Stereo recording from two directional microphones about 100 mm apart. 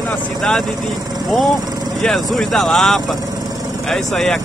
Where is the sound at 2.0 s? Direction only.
5° left (ahead or behind).